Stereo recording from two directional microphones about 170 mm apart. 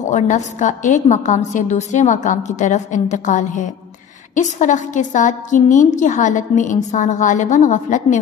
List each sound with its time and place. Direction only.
0.0 s a woman's voice: 45° left (ahead or behind)